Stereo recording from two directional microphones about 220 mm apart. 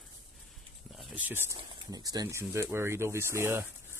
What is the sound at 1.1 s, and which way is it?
Speech, 10° right (ahead or behind).